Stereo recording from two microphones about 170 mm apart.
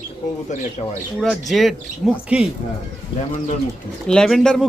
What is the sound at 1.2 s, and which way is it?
Speech, centre (ahead or behind).